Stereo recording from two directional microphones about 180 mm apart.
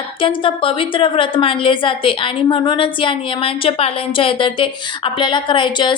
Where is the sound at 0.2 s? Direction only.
30° left (ahead or behind).